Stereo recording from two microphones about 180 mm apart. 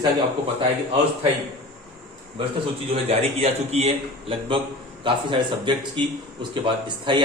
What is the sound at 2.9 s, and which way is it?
A man's voice, 35° right (ahead or behind).